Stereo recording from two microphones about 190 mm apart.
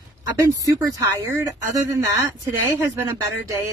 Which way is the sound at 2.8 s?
15° right (ahead or behind).